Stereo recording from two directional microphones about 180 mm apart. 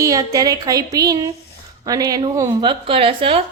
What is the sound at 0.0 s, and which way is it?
Speech, 20° right (ahead or behind).